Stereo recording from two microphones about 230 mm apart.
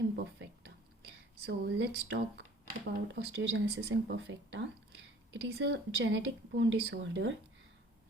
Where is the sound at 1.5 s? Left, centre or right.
Right.